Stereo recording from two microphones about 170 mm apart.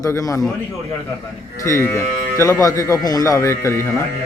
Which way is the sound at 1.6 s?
15° left (ahead or behind).